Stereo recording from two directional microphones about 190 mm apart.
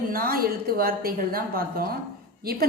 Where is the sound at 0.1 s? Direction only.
50° right (ahead or behind).